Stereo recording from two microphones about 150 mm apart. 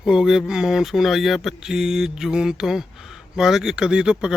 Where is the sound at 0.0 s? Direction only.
5° right (ahead or behind).